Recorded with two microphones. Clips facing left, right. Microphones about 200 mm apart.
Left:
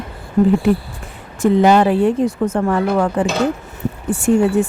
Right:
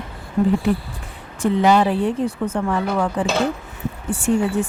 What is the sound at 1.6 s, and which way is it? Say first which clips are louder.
Speech: left 3 dB; 55° left (ahead or behind).